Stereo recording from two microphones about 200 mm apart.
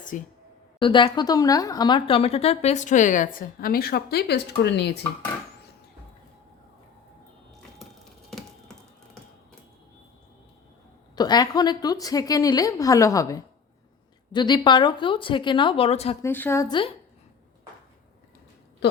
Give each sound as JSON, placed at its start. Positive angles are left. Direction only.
{"t": 0.1, "sound": "speech", "side_deg": 40}
{"t": 0.8, "sound": "speech", "side_deg": 25}
{"t": 8.3, "sound": "a sound", "side_deg": 0}
{"t": 11.1, "sound": "a woman's voice", "side_deg": 20}
{"t": 16.2, "sound": "a woman's voice", "side_deg": 10}